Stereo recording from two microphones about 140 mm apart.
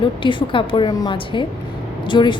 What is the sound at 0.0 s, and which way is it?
A woman's voice, 35° left (ahead or behind).